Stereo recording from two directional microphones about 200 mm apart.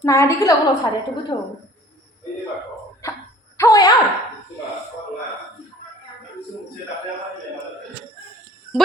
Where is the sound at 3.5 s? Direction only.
15° left (ahead or behind).